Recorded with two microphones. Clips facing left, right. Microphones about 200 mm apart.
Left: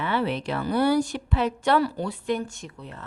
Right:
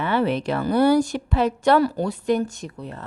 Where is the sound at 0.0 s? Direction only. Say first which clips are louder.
Right 4 dB; 45° right (ahead or behind).